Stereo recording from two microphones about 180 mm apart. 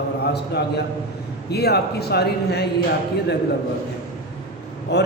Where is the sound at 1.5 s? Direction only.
65° left (ahead or behind).